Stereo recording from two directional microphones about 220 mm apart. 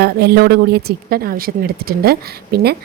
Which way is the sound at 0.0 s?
45° right (ahead or behind).